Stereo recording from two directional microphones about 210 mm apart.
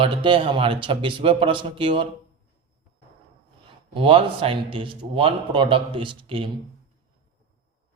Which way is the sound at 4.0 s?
25° right (ahead or behind).